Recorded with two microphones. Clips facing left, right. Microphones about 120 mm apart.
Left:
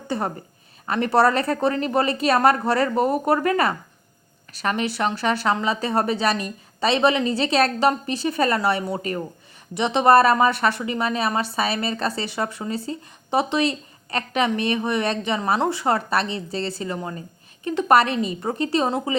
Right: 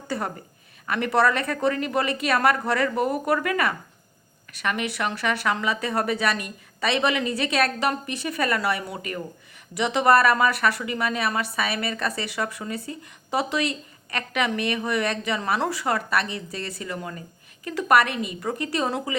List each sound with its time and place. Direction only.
0.1 s a woman's voice: 25° left (ahead or behind)